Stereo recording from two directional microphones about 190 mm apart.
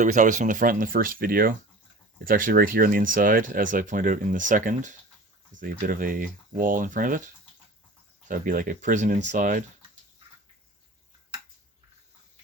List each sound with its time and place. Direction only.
0.0 s speech: 40° right (ahead or behind)
8.3 s speech: 45° right (ahead or behind)